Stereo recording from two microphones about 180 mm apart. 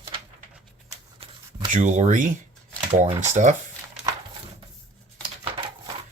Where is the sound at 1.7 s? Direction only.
45° right (ahead or behind).